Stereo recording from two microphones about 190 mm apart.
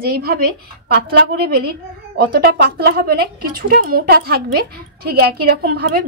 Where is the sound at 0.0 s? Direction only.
50° right (ahead or behind).